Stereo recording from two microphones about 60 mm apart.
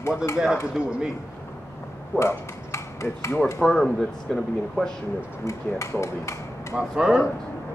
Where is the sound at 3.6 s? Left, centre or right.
Centre.